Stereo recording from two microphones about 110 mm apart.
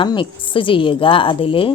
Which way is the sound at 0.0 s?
50° left (ahead or behind).